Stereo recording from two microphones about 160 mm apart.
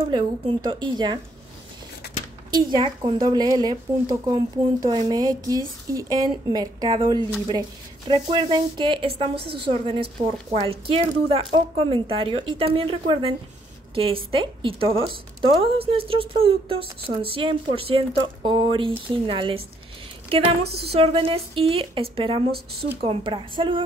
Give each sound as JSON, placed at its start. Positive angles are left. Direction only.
{"t": 0.0, "sound": "speech", "side_deg": -30}
{"t": 2.7, "sound": "a woman's voice", "side_deg": -30}